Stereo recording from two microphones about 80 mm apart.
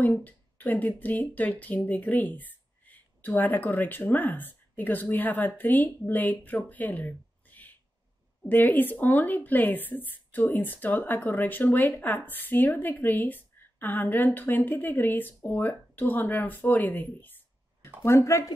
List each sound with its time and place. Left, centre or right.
0.0 s speech: left
18.0 s speech: left